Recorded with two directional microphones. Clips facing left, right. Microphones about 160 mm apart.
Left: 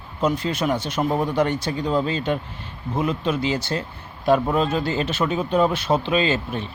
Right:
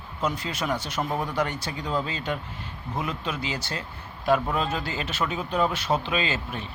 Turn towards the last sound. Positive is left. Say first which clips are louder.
# left 7 dB
turn(degrees=25)  # may be behind; listen again after turning